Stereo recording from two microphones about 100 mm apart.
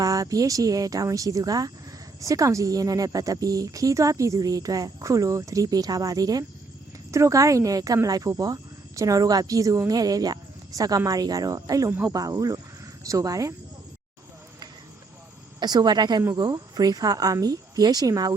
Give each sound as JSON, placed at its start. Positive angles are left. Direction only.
{"t": 0.0, "sound": "a woman's voice", "side_deg": -35}
{"t": 15.6, "sound": "a woman's voice", "side_deg": -45}